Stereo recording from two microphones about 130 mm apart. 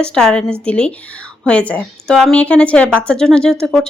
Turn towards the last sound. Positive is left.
turn(degrees=5)  # may be behind; listen again after turning